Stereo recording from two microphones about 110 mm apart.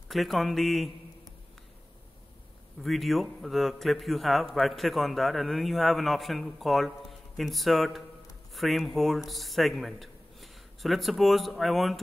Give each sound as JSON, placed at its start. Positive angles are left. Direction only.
{"t": 0.1, "sound": "a man's voice", "side_deg": 0}
{"t": 2.8, "sound": "a man's voice", "side_deg": 0}